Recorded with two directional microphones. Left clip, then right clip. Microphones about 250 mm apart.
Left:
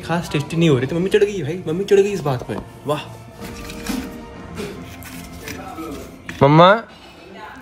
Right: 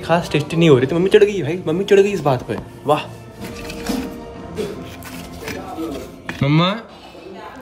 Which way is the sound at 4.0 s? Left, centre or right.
Centre.